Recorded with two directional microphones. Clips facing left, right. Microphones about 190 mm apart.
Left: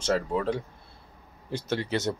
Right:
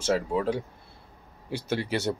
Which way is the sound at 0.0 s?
5° right (ahead or behind).